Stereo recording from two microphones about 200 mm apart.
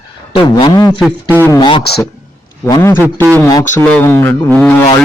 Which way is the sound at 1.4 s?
20° left (ahead or behind).